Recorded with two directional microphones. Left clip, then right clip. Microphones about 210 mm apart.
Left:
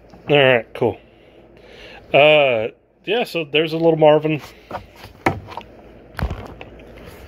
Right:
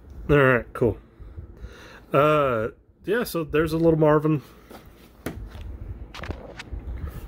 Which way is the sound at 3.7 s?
40° right (ahead or behind).